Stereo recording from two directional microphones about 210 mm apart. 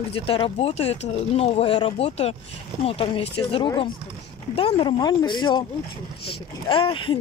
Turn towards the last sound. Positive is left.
turn(degrees=25)  # may be behind; listen again after turning